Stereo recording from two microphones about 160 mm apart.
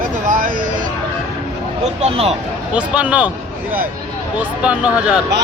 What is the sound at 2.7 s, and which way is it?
A man's voice, 5° right (ahead or behind).